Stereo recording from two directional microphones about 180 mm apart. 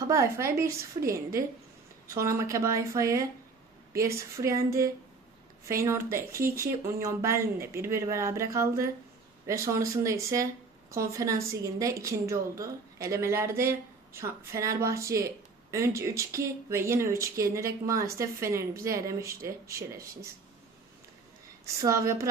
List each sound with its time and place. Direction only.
0.0 s a woman's voice: 15° right (ahead or behind)
21.8 s a woman's voice: 15° right (ahead or behind)